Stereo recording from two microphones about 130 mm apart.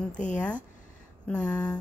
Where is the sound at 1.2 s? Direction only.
10° left (ahead or behind).